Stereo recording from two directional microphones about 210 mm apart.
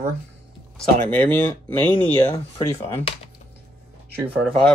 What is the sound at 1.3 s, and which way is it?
Speech, 10° left (ahead or behind).